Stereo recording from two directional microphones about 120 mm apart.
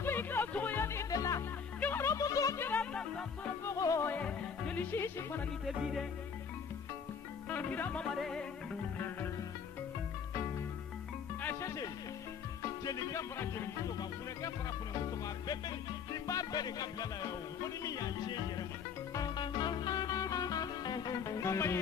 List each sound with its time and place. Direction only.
0.0 s music: 20° left (ahead or behind)
3.6 s music: 25° left (ahead or behind)
4.1 s music: 10° left (ahead or behind)
5.7 s music: centre (ahead or behind)
7.4 s music: 15° left (ahead or behind)
8.9 s music: 15° left (ahead or behind)
11.4 s speech: 25° left (ahead or behind)
12.8 s music: 25° left (ahead or behind)
15.0 s music: 35° left (ahead or behind)